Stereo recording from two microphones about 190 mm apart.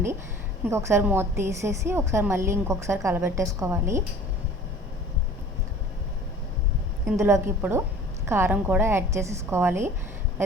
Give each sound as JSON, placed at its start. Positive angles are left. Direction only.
{"t": 0.7, "sound": "a woman's voice", "side_deg": -15}
{"t": 7.2, "sound": "a woman's voice", "side_deg": -15}